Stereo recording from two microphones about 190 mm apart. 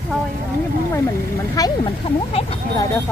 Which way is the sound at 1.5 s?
20° left (ahead or behind).